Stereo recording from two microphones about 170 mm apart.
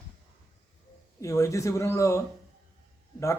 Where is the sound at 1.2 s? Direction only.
20° left (ahead or behind).